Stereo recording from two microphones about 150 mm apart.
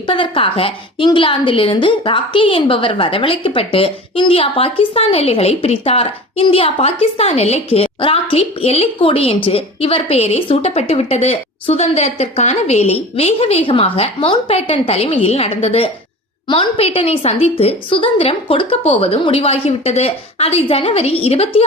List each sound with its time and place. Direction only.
0.1 s a woman's voice: 35° left (ahead or behind)